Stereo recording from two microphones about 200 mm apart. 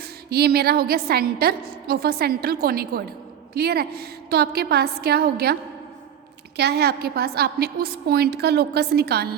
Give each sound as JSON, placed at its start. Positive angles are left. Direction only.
{"t": 0.3, "sound": "a woman's voice", "side_deg": -50}
{"t": 6.6, "sound": "a woman's voice", "side_deg": -55}